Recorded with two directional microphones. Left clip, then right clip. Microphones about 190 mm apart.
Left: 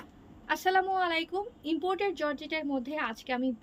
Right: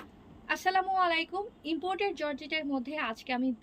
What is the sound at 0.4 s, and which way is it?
A woman's voice, 25° left (ahead or behind).